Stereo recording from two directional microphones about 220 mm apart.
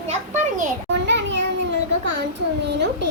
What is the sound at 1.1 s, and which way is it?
Children playing, 55° right (ahead or behind).